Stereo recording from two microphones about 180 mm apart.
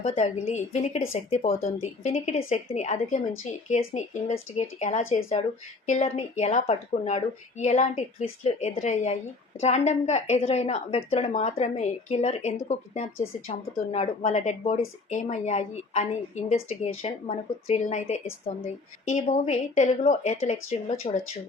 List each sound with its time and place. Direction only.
0.0 s a woman's voice: 35° left (ahead or behind)
19.3 s a woman's voice: 40° left (ahead or behind)